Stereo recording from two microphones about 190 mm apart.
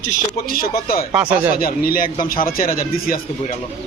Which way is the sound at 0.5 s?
50° left (ahead or behind).